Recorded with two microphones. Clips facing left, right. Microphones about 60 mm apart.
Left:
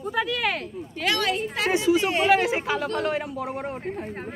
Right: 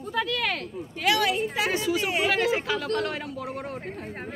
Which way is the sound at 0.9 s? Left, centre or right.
Centre.